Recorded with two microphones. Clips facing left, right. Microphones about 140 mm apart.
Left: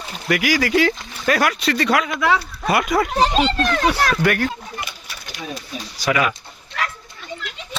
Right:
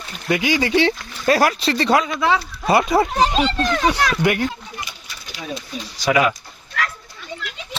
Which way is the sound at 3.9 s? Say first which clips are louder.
Even; 15° right (ahead or behind).